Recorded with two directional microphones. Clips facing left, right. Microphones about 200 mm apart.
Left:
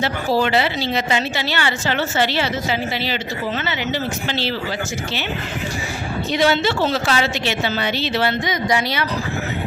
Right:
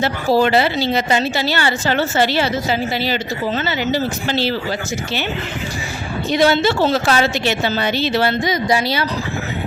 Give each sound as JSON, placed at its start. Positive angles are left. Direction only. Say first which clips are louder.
{"t": 0.3, "sound": "speech", "louder": "right 4 dB", "side_deg": -40}
{"t": 6.3, "sound": "speech", "louder": "right 3 dB", "side_deg": -40}